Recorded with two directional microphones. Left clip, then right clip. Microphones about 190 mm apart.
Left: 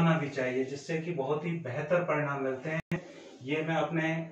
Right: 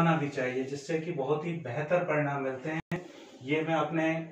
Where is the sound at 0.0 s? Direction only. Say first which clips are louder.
Right 1 dB; centre (ahead or behind).